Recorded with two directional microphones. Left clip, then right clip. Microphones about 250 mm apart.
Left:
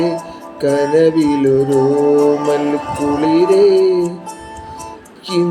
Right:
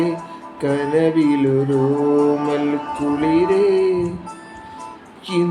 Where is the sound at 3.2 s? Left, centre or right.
Centre.